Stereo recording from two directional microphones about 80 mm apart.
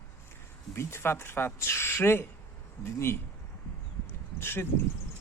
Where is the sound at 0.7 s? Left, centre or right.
Left.